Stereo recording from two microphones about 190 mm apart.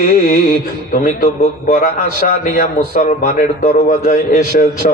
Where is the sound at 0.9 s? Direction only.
45° left (ahead or behind).